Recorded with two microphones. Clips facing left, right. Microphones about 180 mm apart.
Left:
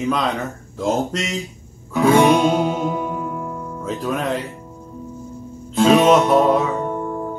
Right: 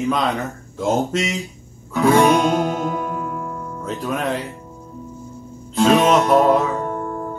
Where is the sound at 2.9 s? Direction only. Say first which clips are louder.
Left 1 dB; 10° left (ahead or behind).